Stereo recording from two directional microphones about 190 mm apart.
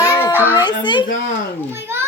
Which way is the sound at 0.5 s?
25° left (ahead or behind).